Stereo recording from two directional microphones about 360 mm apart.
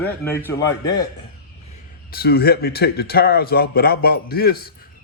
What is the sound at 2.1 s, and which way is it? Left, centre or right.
Speech, left.